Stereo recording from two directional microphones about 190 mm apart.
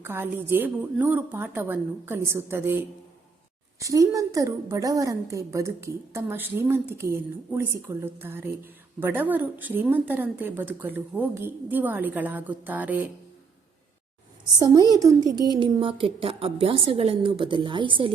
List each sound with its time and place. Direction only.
0.0 s a woman's voice: 10° right (ahead or behind)
3.8 s a woman's voice: 15° right (ahead or behind)
14.6 s a woman's voice: 20° right (ahead or behind)